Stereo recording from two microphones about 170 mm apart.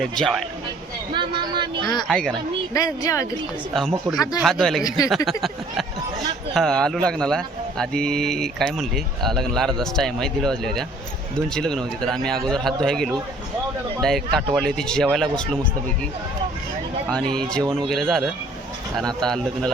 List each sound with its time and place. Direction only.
0.0 s a man's voice: centre (ahead or behind)
1.1 s speech: 30° right (ahead or behind)
2.0 s a man's voice: 5° left (ahead or behind)
2.7 s speech: 20° left (ahead or behind)
3.8 s a man's voice: centre (ahead or behind)
4.8 s speech: 20° left (ahead or behind)
5.0 s a man's voice: centre (ahead or behind)
6.5 s a man's voice: 5° left (ahead or behind)
14.3 s a man's voice: centre (ahead or behind)
17.1 s a man's voice: 5° left (ahead or behind)